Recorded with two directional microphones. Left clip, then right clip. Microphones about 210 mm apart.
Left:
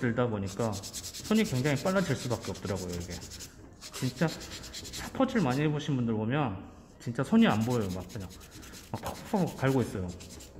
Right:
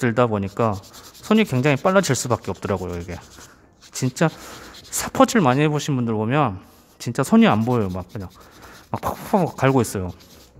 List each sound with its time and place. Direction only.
0.0 s speech: 45° right (ahead or behind)
5.0 s speech: 50° right (ahead or behind)
8.9 s speech: 40° right (ahead or behind)